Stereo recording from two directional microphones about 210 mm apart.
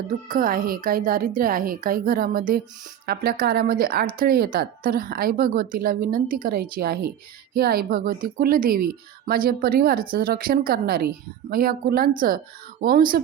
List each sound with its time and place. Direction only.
0.3 s a woman's voice: 40° right (ahead or behind)